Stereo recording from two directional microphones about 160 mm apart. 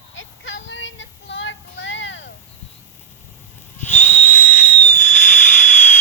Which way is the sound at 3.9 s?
10° left (ahead or behind).